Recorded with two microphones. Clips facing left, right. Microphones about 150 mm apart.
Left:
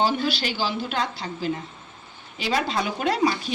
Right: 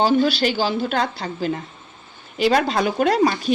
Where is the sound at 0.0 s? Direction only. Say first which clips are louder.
Right 6 dB; 50° right (ahead or behind).